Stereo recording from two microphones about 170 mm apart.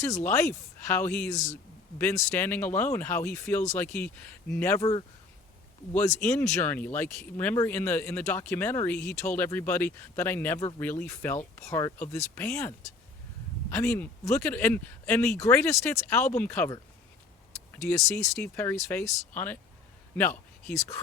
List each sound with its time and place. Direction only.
0.3 s speech: 15° left (ahead or behind)
17.9 s speech: 15° left (ahead or behind)